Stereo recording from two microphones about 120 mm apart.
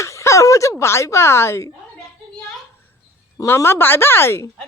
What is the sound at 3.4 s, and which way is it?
Speech, 25° left (ahead or behind).